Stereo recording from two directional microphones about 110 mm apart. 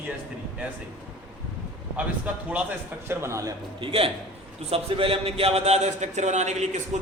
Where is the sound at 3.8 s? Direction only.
55° right (ahead or behind).